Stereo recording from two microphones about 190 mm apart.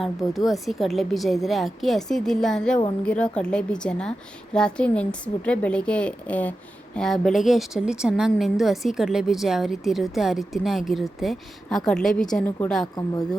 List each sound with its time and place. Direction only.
0.3 s a woman's voice: centre (ahead or behind)
12.8 s speech: 20° left (ahead or behind)